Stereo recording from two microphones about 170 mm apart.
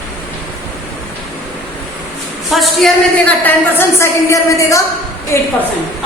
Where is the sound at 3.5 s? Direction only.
15° left (ahead or behind).